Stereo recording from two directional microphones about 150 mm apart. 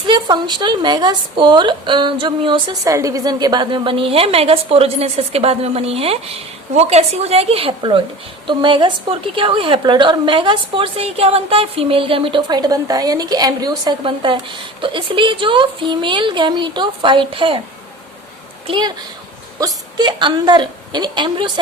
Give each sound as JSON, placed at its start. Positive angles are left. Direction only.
{"t": 0.1, "sound": "a woman's voice", "side_deg": -30}
{"t": 2.8, "sound": "a woman's voice", "side_deg": -20}
{"t": 18.7, "sound": "a woman's voice", "side_deg": -30}